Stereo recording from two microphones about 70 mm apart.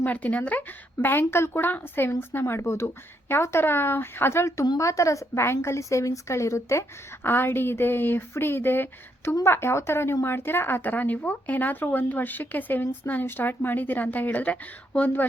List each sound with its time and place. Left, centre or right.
0.0 s speech: left
1.3 s speech: left
2.4 s speech: left
7.3 s speech: left